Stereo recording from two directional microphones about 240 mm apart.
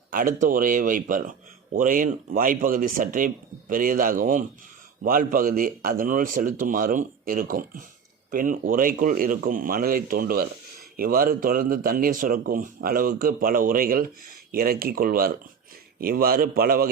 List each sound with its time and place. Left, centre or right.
0.1 s speech: right